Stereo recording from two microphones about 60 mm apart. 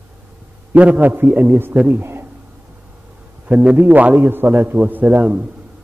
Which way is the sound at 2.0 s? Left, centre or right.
Right.